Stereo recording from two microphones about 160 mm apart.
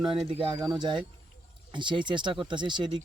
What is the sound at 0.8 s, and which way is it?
Speech, 30° right (ahead or behind).